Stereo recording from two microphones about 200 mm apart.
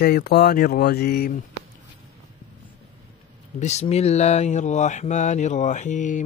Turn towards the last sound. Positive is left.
turn(degrees=40)  # may be behind; listen again after turning